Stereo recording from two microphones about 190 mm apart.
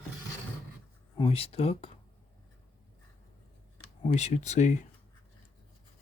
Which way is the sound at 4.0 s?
35° left (ahead or behind).